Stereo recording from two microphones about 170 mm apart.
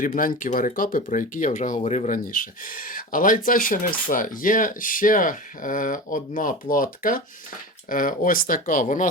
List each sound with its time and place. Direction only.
0.0 s speech: 55° left (ahead or behind)